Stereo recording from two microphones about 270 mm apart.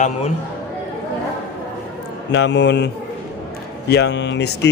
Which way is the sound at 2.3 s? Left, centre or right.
Left.